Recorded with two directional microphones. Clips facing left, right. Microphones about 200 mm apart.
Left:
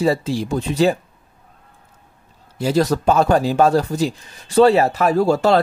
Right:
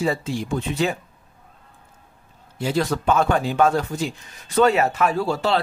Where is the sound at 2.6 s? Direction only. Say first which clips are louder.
Left 5 dB; 40° left (ahead or behind).